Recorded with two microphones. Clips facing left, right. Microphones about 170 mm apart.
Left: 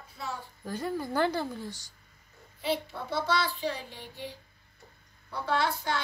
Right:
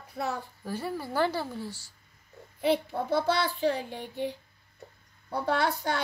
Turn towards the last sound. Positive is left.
turn(degrees=-45)  # may be behind; listen again after turning